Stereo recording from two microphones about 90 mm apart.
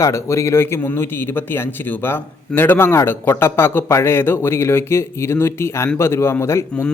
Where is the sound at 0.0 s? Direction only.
35° left (ahead or behind).